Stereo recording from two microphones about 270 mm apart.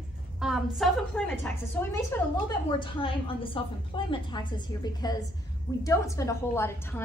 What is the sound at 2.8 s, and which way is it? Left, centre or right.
A woman's voice, centre.